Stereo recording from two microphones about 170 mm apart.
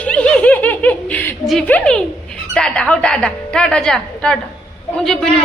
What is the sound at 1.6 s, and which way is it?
A woman's voice, 5° left (ahead or behind).